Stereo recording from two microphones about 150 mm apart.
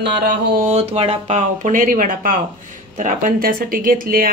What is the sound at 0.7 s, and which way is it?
Speech, 45° right (ahead or behind).